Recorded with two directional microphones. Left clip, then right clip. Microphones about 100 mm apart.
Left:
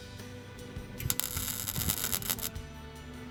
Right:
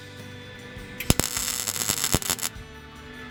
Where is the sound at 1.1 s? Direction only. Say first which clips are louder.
Right 11 dB; 15° left (ahead or behind).